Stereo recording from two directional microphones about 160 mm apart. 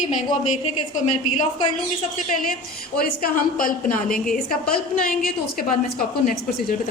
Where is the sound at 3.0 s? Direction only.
60° left (ahead or behind).